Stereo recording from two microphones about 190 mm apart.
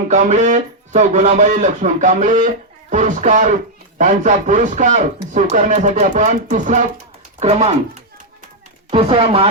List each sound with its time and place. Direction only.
0.1 s speech: 40° right (ahead or behind)
8.9 s speech: 30° right (ahead or behind)